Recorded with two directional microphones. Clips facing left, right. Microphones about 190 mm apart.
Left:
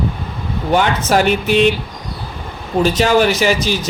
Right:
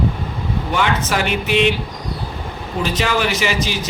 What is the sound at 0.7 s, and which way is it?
A man's voice, 40° left (ahead or behind).